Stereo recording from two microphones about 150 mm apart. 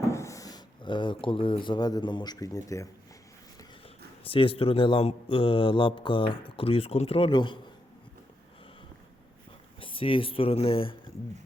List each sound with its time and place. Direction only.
0.1 s speech: 20° left (ahead or behind)
4.2 s speech: 35° left (ahead or behind)
9.8 s speech: 35° left (ahead or behind)